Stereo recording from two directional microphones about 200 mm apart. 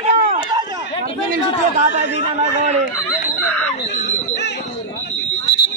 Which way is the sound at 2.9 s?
10° left (ahead or behind).